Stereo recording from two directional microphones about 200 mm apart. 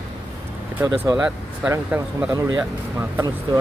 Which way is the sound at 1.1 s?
5° right (ahead or behind).